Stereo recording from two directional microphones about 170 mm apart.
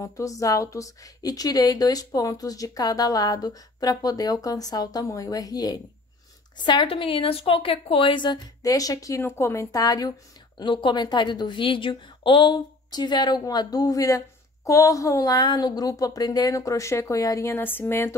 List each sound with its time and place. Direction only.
0.0 s a woman's voice: 20° left (ahead or behind)